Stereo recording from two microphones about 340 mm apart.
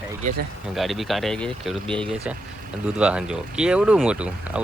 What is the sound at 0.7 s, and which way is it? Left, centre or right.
Speech, centre.